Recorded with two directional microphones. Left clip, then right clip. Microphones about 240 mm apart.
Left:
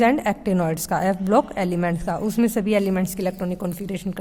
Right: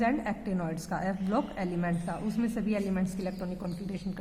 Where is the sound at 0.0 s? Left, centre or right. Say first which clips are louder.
Left 11 dB; left.